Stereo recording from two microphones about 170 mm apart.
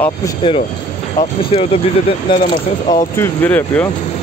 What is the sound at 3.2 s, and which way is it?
Speech, 10° left (ahead or behind).